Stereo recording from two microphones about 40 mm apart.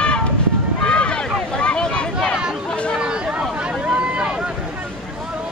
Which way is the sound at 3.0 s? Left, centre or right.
Right.